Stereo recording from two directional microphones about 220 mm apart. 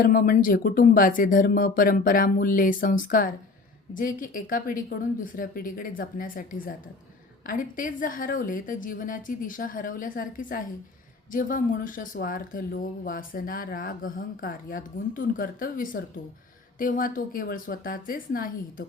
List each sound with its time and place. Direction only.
0.0 s speech: 40° left (ahead or behind)